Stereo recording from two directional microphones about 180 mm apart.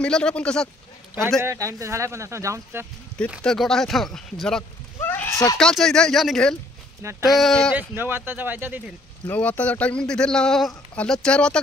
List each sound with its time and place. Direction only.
0.0 s speech: 5° left (ahead or behind)
1.4 s speech: 15° right (ahead or behind)
3.3 s speech: centre (ahead or behind); by 5.6 s 15° left (ahead or behind)
5.6 s speech: 5° left (ahead or behind)
7.0 s speech: 15° right (ahead or behind)
7.2 s speech: centre (ahead or behind)
7.9 s speech: 10° right (ahead or behind)
9.3 s speech: 10° left (ahead or behind)